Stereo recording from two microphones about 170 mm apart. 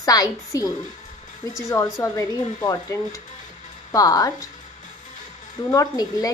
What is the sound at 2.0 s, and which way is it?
A woman's voice, 20° left (ahead or behind).